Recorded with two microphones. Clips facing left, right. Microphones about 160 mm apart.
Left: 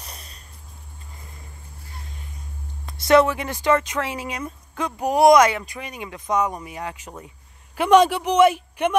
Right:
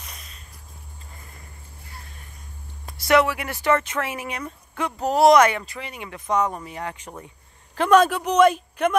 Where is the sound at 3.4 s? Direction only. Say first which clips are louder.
Left 1 dB; 15° left (ahead or behind).